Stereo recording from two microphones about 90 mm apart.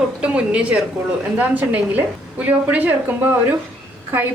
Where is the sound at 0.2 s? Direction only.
15° right (ahead or behind).